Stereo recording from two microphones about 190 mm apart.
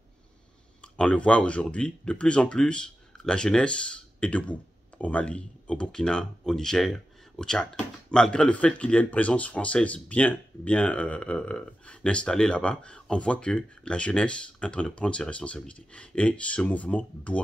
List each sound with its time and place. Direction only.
0.9 s speech: 5° left (ahead or behind)